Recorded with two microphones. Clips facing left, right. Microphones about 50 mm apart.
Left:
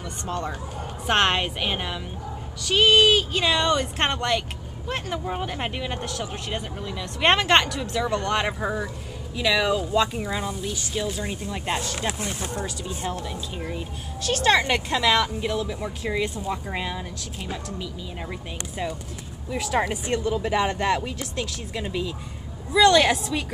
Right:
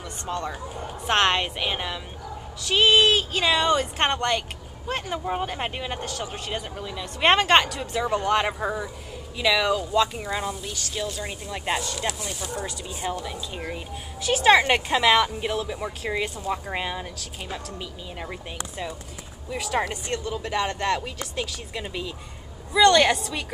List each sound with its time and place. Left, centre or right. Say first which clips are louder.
0.3 s speech: even; centre
10.7 s speech: left 2 dB; centre
12.1 s speech: left 2 dB; left
13.0 s a woman's voice: right 2 dB; centre
18.2 s speech: right 2 dB; centre